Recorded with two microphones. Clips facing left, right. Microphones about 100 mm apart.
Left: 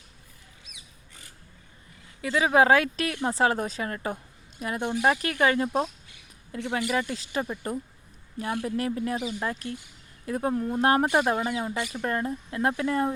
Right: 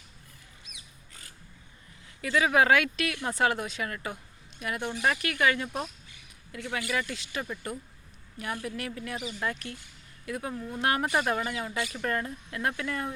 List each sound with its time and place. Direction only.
2.2 s speech: 30° left (ahead or behind)